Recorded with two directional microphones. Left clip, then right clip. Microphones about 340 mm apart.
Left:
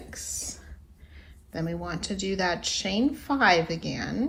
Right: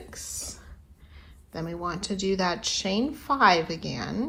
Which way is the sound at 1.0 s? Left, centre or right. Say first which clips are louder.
Left 1 dB; centre.